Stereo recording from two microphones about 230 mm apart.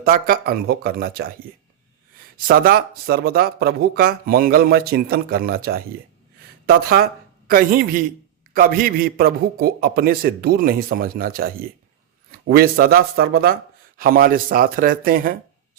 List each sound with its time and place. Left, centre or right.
0.0 s a man's voice: right
2.5 s a man's voice: right
12.5 s a man's voice: right